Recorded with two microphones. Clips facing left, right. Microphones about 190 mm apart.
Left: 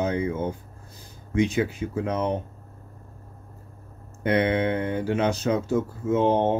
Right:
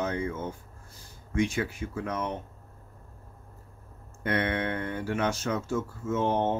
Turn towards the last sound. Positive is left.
turn(degrees=20)  # may be behind; listen again after turning